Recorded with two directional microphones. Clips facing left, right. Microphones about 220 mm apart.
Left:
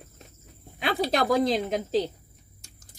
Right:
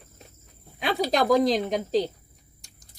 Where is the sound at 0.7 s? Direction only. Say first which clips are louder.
Right 1 dB; centre (ahead or behind).